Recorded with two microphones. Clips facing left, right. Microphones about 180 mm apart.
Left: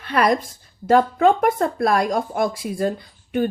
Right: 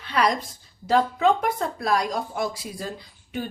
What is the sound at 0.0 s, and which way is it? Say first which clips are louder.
A woman's voice: left 4 dB; 55° left (ahead or behind).